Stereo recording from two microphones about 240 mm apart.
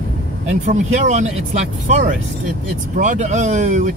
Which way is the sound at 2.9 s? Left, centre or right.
Right.